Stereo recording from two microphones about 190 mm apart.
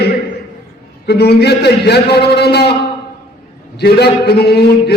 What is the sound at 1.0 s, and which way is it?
A man's voice, 55° left (ahead or behind).